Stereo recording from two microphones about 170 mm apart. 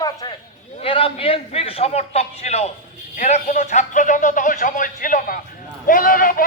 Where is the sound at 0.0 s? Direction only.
20° left (ahead or behind).